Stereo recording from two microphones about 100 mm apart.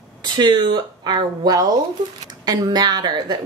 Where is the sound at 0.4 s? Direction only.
45° right (ahead or behind).